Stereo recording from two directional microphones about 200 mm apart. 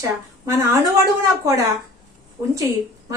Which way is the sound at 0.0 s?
15° right (ahead or behind).